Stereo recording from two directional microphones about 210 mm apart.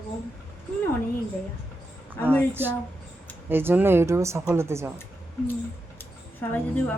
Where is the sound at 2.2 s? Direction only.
10° left (ahead or behind).